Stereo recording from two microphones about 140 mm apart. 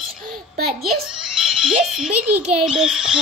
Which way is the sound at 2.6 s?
5° right (ahead or behind).